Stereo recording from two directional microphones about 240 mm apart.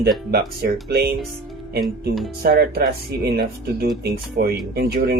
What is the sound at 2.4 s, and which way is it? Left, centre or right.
Speech, right.